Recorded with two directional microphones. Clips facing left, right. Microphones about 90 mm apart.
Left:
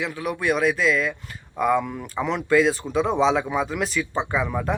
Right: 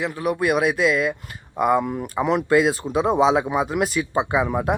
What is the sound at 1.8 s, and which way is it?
Speech, 25° right (ahead or behind).